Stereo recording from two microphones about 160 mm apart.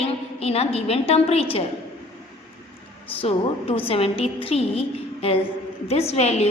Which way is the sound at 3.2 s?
35° left (ahead or behind).